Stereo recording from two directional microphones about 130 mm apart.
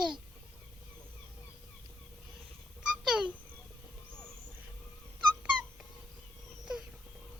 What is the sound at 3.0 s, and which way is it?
Babbling, 5° right (ahead or behind).